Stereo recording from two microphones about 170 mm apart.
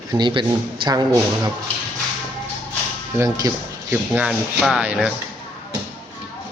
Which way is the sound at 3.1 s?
20° right (ahead or behind).